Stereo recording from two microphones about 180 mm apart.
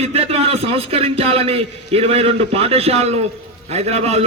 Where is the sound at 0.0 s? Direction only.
35° right (ahead or behind).